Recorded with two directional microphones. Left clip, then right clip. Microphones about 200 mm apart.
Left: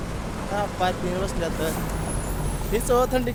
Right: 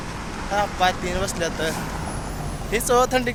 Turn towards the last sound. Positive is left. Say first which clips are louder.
# right 3 dB
turn(degrees=0)  # may be behind; listen again after turning